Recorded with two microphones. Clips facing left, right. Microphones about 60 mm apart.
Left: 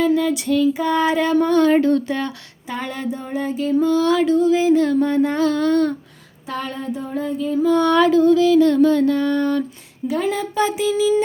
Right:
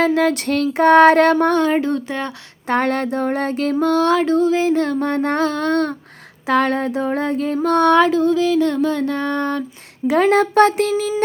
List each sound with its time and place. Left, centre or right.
0.0 s child singing: right
1.7 s speech: right
2.6 s child singing: right
4.0 s a sound: right
6.5 s child singing: right
7.9 s a sound: right
10.1 s child singing: right